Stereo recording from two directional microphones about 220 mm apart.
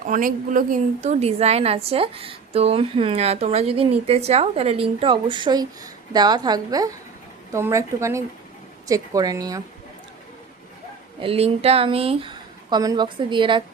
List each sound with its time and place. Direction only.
0.0 s a woman's voice: 40° right (ahead or behind); by 9.6 s 15° right (ahead or behind)
11.2 s a woman's voice: 25° right (ahead or behind)